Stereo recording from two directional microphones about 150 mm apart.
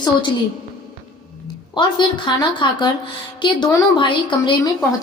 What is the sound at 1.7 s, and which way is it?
A woman's voice, 30° left (ahead or behind).